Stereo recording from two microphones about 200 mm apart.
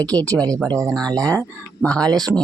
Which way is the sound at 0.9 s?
5° left (ahead or behind).